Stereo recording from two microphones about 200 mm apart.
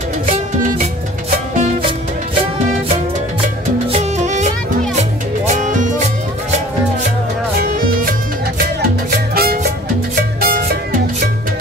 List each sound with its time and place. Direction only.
1.5 s music: 35° right (ahead or behind)
3.9 s music: 35° right (ahead or behind)
9.3 s music: 50° right (ahead or behind)